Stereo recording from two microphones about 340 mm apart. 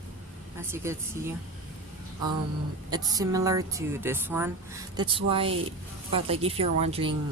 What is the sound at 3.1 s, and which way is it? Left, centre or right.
Speech, centre.